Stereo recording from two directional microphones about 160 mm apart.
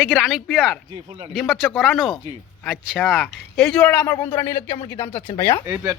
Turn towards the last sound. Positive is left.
turn(degrees=-15)  # may be behind; listen again after turning